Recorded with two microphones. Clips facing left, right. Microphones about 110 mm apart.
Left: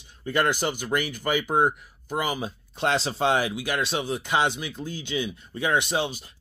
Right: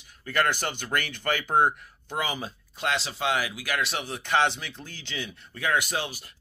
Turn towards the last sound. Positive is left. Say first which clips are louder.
# left 5 dB
turn(degrees=20)  # may be behind; listen again after turning